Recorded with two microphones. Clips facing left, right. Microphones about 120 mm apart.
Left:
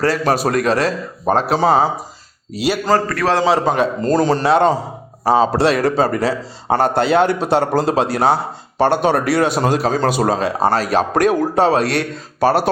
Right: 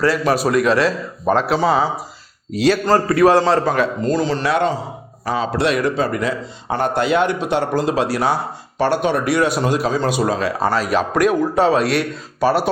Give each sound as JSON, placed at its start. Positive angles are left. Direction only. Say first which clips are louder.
{"t": 0.0, "sound": "a man's voice", "louder": "even", "side_deg": 40}
{"t": 2.6, "sound": "a man's voice", "louder": "right 3 dB", "side_deg": 10}
{"t": 3.1, "sound": "a man's voice", "louder": "right 5 dB", "side_deg": -10}
{"t": 3.6, "sound": "speech", "louder": "left 1 dB", "side_deg": 20}
{"t": 4.0, "sound": "a man's voice", "louder": "left 3 dB", "side_deg": 45}